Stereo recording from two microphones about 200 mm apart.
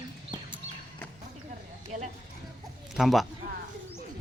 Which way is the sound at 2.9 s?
Centre (ahead or behind).